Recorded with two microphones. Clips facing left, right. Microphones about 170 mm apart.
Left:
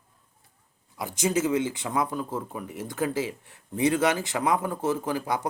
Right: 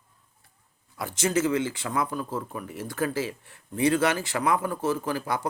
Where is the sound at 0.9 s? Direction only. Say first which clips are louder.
Even; 15° left (ahead or behind).